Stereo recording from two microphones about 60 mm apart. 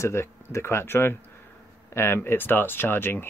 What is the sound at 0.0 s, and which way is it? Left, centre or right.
Speech, left.